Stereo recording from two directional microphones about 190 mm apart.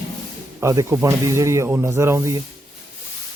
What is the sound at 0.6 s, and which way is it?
Speech, 15° right (ahead or behind).